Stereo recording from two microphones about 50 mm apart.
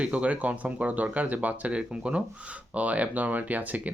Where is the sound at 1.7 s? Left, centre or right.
Right.